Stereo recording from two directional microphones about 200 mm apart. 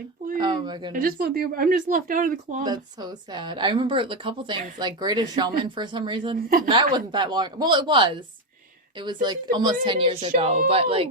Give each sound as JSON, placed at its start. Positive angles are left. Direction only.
{"t": 0.3, "sound": "a sound", "side_deg": -25}
{"t": 0.9, "sound": "speech", "side_deg": -45}
{"t": 2.6, "sound": "a woman's voice", "side_deg": -20}
{"t": 9.2, "sound": "a woman's voice", "side_deg": -20}